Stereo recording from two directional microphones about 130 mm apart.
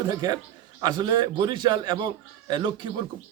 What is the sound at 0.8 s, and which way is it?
A man's voice, 35° right (ahead or behind).